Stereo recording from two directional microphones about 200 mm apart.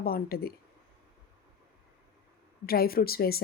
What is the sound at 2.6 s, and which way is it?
Speech, 50° left (ahead or behind).